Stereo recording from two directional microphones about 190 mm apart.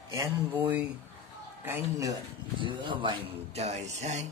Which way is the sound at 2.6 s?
25° right (ahead or behind).